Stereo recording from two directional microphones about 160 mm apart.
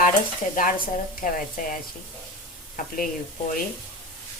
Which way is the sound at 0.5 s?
55° left (ahead or behind).